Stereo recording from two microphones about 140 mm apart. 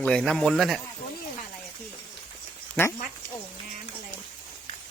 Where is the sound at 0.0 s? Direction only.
5° left (ahead or behind).